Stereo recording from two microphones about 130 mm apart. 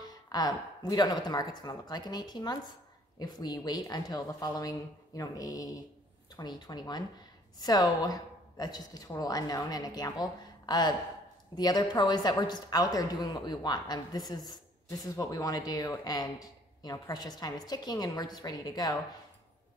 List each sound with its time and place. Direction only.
0.0 s a woman's voice: 30° left (ahead or behind)